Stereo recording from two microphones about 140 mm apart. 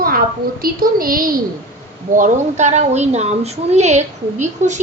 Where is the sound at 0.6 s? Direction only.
90° right.